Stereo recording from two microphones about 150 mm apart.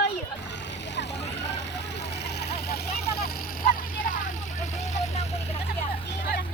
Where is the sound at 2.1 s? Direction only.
90° left; by 5.6 s 45° left (ahead or behind).